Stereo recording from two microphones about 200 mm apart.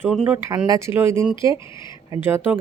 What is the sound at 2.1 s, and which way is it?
Speech, 10° right (ahead or behind).